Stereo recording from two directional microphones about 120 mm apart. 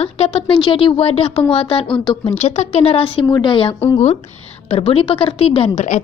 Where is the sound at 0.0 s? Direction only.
55° left (ahead or behind).